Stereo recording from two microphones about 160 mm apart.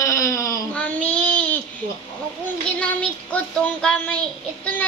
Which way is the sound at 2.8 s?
10° left (ahead or behind).